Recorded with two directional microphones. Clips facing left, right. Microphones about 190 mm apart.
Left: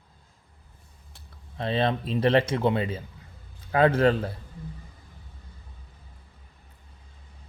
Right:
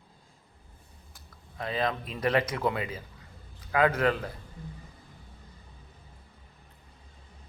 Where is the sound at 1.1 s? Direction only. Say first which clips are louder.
Left 4 dB; 30° left (ahead or behind).